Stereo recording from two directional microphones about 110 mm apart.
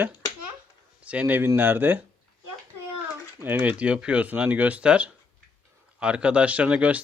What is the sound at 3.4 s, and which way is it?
Speech, 15° right (ahead or behind).